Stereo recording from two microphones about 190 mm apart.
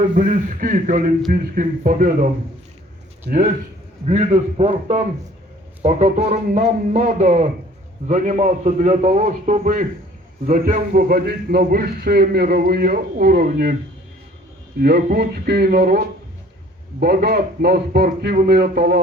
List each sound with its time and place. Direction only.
0.0 s a man's voice: 40° right (ahead or behind)
3.3 s speech: 55° right (ahead or behind)
4.0 s a man's voice: 35° right (ahead or behind); by 13.7 s 55° right (ahead or behind)
14.8 s speech: 55° right (ahead or behind)